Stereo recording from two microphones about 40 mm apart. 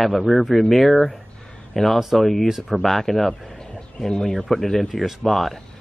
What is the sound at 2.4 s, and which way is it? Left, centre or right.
Speech, centre.